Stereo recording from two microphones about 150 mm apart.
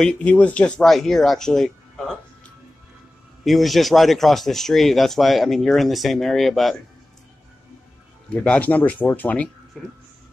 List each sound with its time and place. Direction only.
0.0 s speech: 5° left (ahead or behind)
3.4 s speech: centre (ahead or behind)
8.3 s speech: 10° left (ahead or behind)